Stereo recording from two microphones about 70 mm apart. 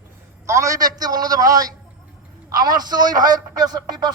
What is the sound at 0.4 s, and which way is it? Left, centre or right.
A man's voice, right.